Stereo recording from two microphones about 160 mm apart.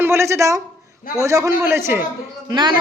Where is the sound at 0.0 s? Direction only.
15° right (ahead or behind).